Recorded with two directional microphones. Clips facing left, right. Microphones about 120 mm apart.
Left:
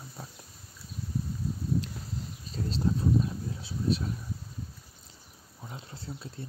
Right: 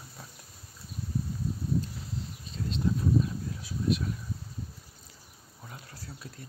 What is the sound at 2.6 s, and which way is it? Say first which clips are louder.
Speech: left 1 dB; 40° left (ahead or behind).